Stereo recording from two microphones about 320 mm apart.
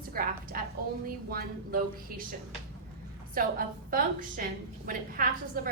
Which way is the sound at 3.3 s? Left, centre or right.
Right.